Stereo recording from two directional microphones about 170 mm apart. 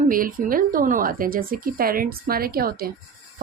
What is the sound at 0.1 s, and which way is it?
Speech, 55° right (ahead or behind).